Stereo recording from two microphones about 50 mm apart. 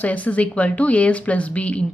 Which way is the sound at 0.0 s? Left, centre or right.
Left.